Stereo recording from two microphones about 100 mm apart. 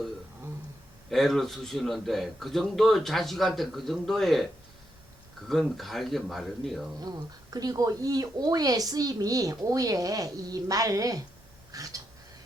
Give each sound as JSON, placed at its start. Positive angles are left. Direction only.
{"t": 1.1, "sound": "a man's voice", "side_deg": 0}
{"t": 5.5, "sound": "a man's voice", "side_deg": 0}
{"t": 7.0, "sound": "speech", "side_deg": -40}
{"t": 11.7, "sound": "a sound", "side_deg": -35}